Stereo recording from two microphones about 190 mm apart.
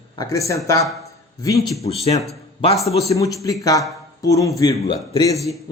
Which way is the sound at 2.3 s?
30° left (ahead or behind).